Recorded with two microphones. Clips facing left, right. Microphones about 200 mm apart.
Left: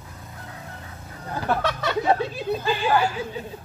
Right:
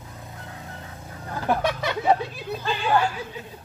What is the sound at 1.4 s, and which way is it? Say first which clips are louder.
Speech: right 1 dB; 15° right (ahead or behind).